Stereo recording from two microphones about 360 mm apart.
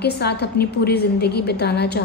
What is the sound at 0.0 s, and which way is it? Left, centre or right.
A woman's voice, left.